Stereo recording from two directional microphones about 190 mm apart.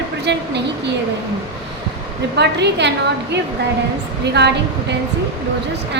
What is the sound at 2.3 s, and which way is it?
Speech, 60° right (ahead or behind).